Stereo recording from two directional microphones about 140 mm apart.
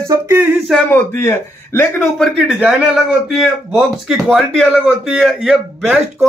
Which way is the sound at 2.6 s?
5° right (ahead or behind).